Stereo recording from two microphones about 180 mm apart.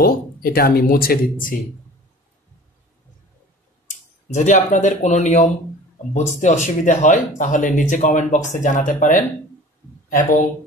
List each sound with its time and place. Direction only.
0.0 s speech: 55° left (ahead or behind)
3.8 s speech: 40° left (ahead or behind)